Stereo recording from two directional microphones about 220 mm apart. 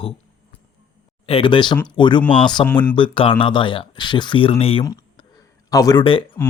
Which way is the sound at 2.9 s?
25° left (ahead or behind).